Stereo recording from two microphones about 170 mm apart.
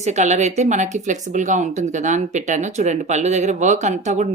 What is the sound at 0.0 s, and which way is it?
Speech, 45° right (ahead or behind).